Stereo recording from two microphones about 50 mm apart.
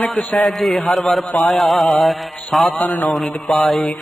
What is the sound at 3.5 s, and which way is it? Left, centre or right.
Mantra, centre.